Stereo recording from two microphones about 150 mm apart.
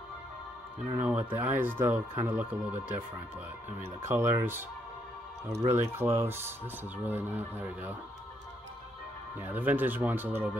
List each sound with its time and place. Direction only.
0.9 s speech: 10° right (ahead or behind)
4.1 s speech: 15° right (ahead or behind)
5.7 s speech: 15° right (ahead or behind)
9.4 s speech: 10° right (ahead or behind)